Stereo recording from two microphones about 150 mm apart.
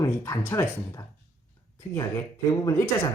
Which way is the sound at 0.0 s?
20° left (ahead or behind).